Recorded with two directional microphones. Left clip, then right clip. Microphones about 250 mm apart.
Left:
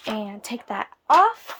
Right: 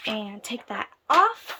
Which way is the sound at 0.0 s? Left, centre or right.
Centre.